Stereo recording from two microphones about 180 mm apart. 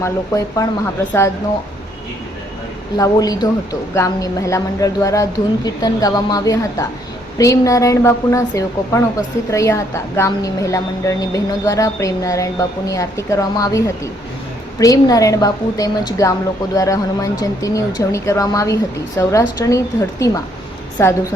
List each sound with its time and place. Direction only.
0.0 s a woman's voice: 20° left (ahead or behind)
3.0 s a woman's voice: 20° left (ahead or behind)